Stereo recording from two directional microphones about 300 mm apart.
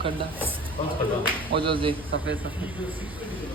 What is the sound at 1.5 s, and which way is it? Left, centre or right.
Speech, centre.